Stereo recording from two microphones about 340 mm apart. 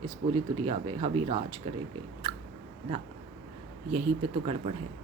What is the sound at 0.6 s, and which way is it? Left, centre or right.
Speech, centre.